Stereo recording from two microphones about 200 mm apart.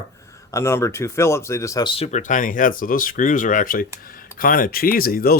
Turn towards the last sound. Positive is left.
turn(degrees=50)  # may be behind; listen again after turning